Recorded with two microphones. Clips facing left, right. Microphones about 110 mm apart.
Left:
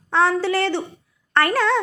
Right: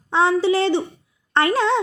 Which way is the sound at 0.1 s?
15° right (ahead or behind).